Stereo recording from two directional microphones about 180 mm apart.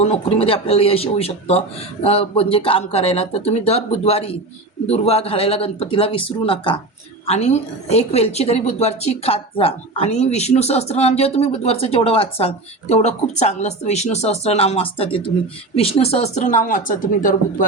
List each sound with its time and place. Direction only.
0.0 s a woman's voice: 30° left (ahead or behind); by 17.7 s 50° left (ahead or behind)